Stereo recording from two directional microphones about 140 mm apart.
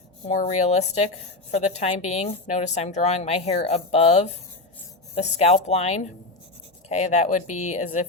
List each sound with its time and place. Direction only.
0.3 s a woman's voice: 55° left (ahead or behind)